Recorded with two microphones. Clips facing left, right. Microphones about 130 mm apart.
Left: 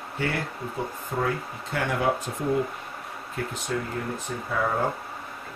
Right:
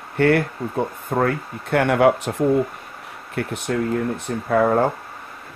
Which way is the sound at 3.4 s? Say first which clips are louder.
Right 7 dB; 70° right (ahead or behind).